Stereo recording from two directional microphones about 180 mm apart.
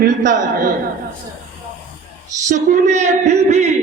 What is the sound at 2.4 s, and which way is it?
A man's voice, 40° right (ahead or behind).